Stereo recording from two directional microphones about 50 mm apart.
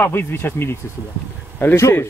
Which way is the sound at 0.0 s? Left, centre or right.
Left.